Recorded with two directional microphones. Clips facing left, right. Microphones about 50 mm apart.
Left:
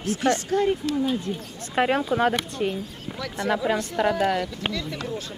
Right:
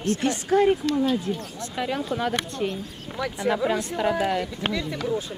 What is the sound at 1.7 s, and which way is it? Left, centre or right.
Speech, left.